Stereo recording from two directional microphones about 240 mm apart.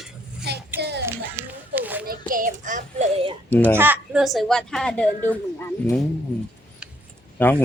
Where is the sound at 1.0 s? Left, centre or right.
Centre.